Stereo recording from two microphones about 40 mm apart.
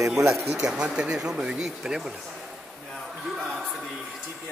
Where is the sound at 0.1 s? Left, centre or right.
Centre.